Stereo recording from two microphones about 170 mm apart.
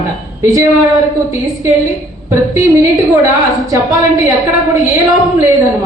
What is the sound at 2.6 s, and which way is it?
Speech, 20° right (ahead or behind).